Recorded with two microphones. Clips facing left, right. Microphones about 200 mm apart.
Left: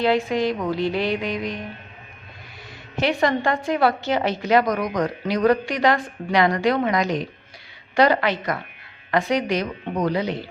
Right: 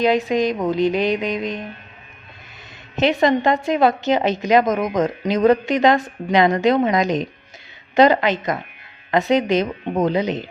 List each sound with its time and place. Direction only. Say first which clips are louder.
0.0 s a woman's voice: right 3 dB; 20° right (ahead or behind)
2.9 s a woman's voice: right 4 dB; 20° right (ahead or behind)